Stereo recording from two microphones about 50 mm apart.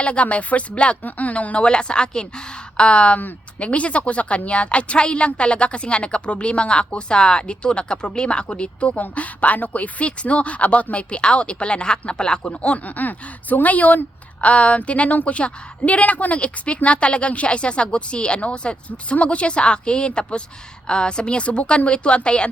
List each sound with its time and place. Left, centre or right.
0.0 s a woman's voice: left
1.6 s a woman's voice: centre